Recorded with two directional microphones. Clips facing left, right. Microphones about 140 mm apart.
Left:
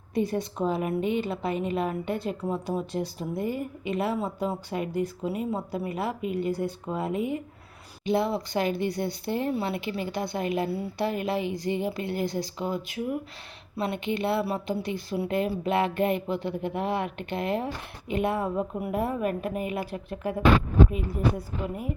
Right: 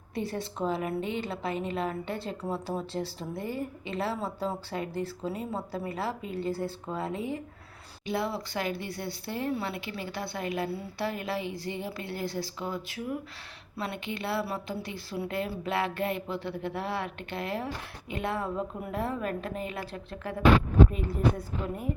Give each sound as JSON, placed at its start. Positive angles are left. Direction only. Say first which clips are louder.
{"t": 0.1, "sound": "a woman's voice", "louder": "left 6 dB", "side_deg": 20}